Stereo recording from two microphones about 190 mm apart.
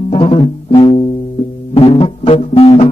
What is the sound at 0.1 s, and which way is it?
Music, 30° left (ahead or behind).